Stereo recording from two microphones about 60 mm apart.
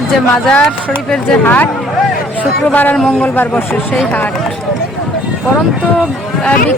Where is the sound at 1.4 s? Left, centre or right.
Left.